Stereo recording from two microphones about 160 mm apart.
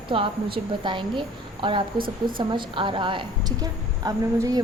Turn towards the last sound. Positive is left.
turn(degrees=-20)  # may be behind; listen again after turning